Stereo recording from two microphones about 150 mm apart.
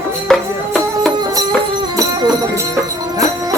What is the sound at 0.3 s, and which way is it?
Music, centre (ahead or behind).